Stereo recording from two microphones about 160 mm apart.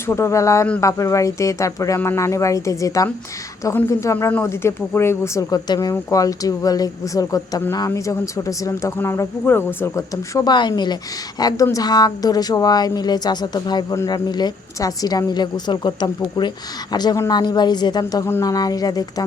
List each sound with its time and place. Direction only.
0.1 s speech: 15° left (ahead or behind)